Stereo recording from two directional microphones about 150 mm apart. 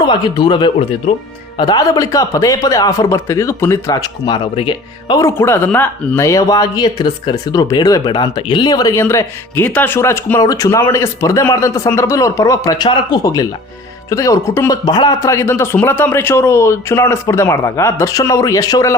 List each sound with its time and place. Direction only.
0.0 s speech: 30° left (ahead or behind)
4.4 s speech: 35° left (ahead or behind)
5.2 s speech: 15° left (ahead or behind)
14.8 s a man's voice: 25° left (ahead or behind)